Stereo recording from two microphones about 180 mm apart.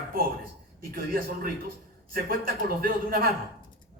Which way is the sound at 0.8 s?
55° right (ahead or behind).